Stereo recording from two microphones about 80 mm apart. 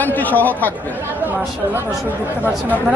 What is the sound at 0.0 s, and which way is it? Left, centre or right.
Speech, left.